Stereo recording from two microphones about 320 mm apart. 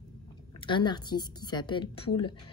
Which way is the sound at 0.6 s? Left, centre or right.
Centre.